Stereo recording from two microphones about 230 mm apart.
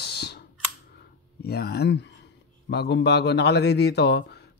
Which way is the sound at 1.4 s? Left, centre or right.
Left.